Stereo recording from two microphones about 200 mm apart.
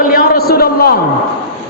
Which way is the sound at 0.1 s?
50° left (ahead or behind).